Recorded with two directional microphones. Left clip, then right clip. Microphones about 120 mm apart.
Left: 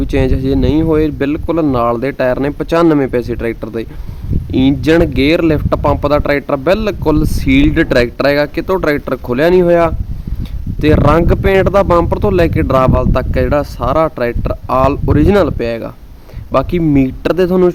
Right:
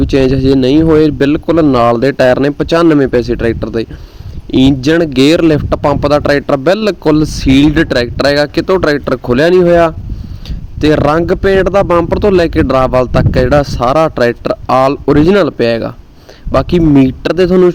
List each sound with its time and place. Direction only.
0.0 s speech: 35° right (ahead or behind)